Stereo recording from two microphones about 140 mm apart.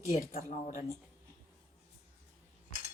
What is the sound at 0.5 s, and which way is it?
Speech, 55° left (ahead or behind).